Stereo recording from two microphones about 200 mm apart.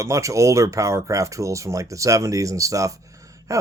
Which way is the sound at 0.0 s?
15° right (ahead or behind).